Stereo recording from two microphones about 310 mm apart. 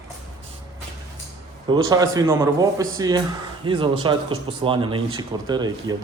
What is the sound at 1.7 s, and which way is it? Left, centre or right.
Speech, centre.